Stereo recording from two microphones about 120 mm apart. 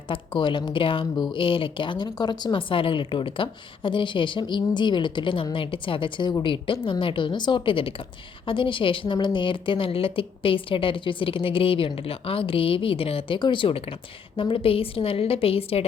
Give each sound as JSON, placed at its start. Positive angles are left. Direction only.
{"t": 0.1, "sound": "speech", "side_deg": 40}